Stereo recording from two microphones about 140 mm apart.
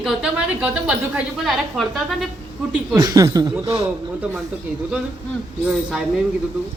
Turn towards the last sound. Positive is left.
turn(degrees=-5)  # may be behind; listen again after turning